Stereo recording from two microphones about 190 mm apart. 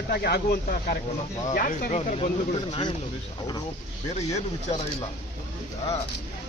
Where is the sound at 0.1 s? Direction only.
60° left (ahead or behind).